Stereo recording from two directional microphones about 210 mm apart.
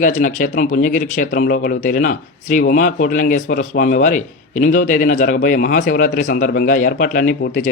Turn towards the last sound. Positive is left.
turn(degrees=40)  # may be behind; listen again after turning